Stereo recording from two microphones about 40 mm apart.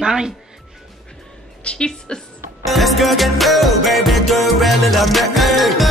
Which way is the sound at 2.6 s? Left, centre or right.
Centre.